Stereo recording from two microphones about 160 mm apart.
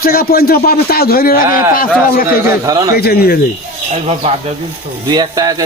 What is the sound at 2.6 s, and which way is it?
Speech, 20° right (ahead or behind).